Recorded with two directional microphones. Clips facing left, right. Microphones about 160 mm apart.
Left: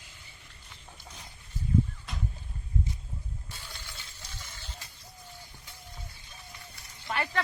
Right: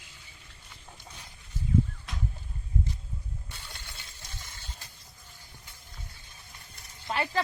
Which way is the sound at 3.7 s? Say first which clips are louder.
Left 1 dB; 55° right (ahead or behind).